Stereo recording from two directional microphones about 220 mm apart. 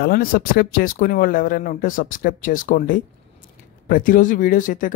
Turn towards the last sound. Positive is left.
turn(degrees=35)  # may be behind; listen again after turning